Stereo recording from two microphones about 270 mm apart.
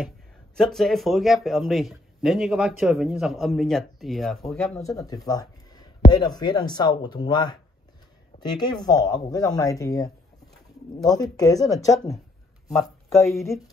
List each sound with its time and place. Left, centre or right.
0.6 s speech: centre
4.8 s speech: centre
13.2 s speech: centre